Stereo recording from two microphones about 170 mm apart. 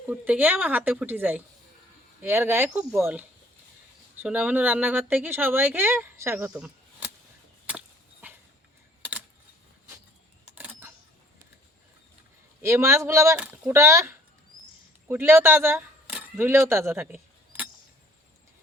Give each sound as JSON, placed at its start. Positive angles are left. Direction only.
{"t": 0.1, "sound": "speech", "side_deg": -10}
{"t": 7.7, "sound": "chop", "side_deg": -10}
{"t": 10.5, "sound": "camera", "side_deg": -10}
{"t": 12.6, "sound": "speech", "side_deg": -15}
{"t": 16.6, "sound": "a sound", "side_deg": -15}